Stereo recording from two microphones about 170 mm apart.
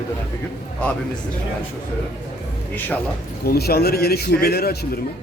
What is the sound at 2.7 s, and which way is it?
Speech, 10° left (ahead or behind).